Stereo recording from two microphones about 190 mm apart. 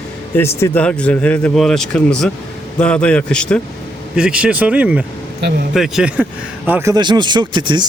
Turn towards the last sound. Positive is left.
turn(degrees=-25)  # may be behind; listen again after turning